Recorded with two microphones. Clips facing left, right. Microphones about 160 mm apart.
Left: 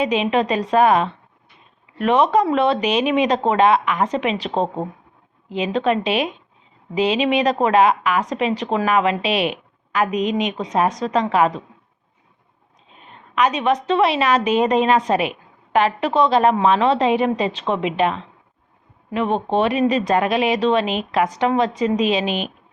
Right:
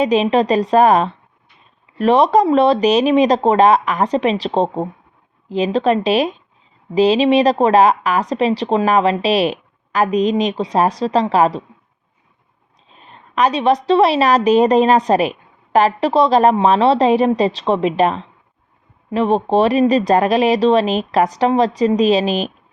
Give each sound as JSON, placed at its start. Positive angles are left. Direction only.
{"t": 0.0, "sound": "a woman's voice", "side_deg": -40}
{"t": 13.0, "sound": "a woman's voice", "side_deg": -35}